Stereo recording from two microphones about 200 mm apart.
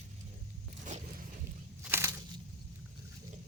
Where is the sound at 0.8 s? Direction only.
40° right (ahead or behind).